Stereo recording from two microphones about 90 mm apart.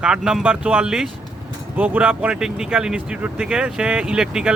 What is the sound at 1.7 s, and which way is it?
Speech, 20° right (ahead or behind).